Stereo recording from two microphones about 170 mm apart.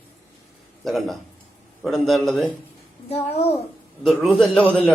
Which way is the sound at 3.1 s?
35° left (ahead or behind).